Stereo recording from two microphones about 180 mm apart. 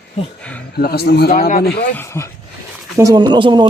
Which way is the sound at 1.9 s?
15° left (ahead or behind).